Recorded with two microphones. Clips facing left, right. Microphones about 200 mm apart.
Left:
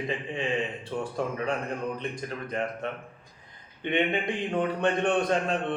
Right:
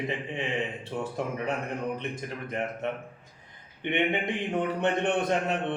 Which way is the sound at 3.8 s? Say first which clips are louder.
Left 1 dB; 20° right (ahead or behind).